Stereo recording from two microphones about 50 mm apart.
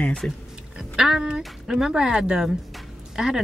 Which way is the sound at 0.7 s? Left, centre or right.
Centre.